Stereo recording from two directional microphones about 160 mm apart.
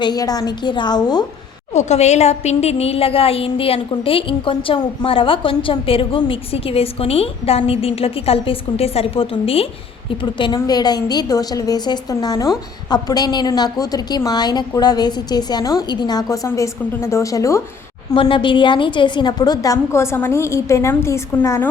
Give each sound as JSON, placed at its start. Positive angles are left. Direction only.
{"t": 0.0, "sound": "a woman's voice", "side_deg": 25}
{"t": 1.7, "sound": "a woman's voice", "side_deg": 45}
{"t": 18.1, "sound": "a woman's voice", "side_deg": 30}